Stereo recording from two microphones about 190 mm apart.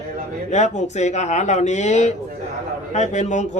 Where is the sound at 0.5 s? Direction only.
35° left (ahead or behind).